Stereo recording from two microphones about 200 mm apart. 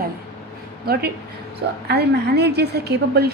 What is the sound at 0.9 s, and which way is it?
A woman's voice, 50° right (ahead or behind).